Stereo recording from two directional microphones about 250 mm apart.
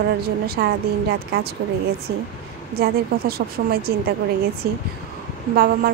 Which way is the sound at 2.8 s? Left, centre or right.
Right.